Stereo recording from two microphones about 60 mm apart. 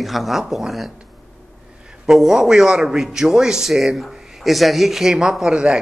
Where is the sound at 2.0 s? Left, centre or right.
Centre.